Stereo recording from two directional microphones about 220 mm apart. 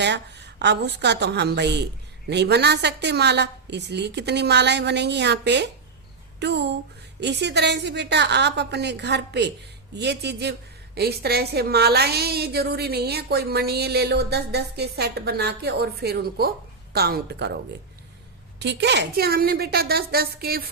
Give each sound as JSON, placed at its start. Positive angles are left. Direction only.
{"t": 0.0, "sound": "a woman's voice", "side_deg": -50}
{"t": 18.6, "sound": "a woman's voice", "side_deg": -50}